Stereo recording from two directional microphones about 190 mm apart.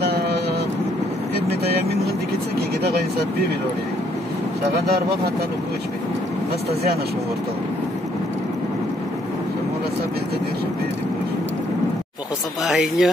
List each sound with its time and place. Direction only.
0.0 s vehicle: 60° right (ahead or behind)
4.8 s speech: 60° right (ahead or behind)
12.6 s speech: centre (ahead or behind)